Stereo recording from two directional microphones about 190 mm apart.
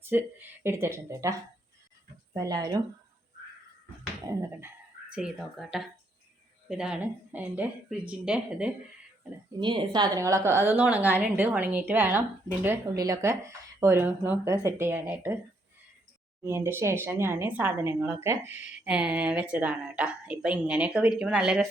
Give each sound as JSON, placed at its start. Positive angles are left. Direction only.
{"t": 0.0, "sound": "speech", "side_deg": -10}
{"t": 4.3, "sound": "speech", "side_deg": -15}
{"t": 5.1, "sound": "a woman's voice", "side_deg": -5}
{"t": 9.6, "sound": "speech", "side_deg": -25}
{"t": 16.4, "sound": "speech", "side_deg": -15}